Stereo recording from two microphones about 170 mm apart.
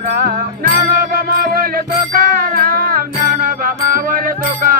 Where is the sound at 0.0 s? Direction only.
60° right (ahead or behind).